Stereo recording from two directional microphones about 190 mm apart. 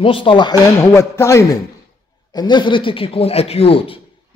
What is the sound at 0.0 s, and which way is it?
Speech, 25° left (ahead or behind).